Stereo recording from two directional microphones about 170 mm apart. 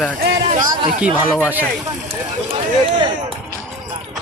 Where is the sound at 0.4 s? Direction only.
45° right (ahead or behind).